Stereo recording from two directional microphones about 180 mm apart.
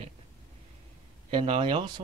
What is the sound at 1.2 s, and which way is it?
Speech, 30° right (ahead or behind).